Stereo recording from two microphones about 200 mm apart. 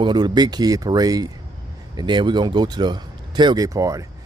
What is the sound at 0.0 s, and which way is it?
Speech, 20° right (ahead or behind).